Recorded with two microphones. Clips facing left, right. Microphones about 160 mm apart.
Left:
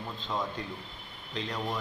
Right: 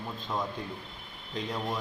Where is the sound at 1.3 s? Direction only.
5° right (ahead or behind).